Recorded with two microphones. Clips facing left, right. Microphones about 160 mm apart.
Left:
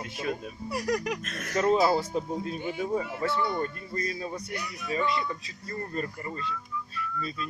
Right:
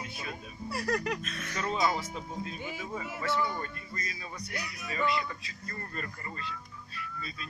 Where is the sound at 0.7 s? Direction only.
15° left (ahead or behind).